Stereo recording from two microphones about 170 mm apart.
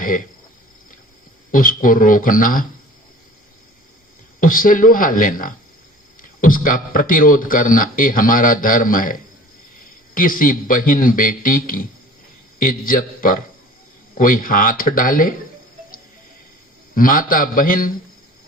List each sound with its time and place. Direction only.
0.0 s speech: 50° left (ahead or behind)
1.5 s speech: 55° left (ahead or behind)
4.4 s a man's voice: 55° left (ahead or behind)
16.9 s a man's voice: 55° left (ahead or behind)